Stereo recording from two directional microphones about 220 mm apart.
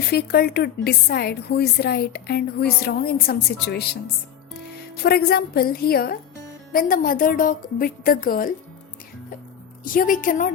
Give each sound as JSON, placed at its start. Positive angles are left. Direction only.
{"t": 0.1, "sound": "a woman's voice", "side_deg": 45}
{"t": 9.8, "sound": "a woman's voice", "side_deg": 40}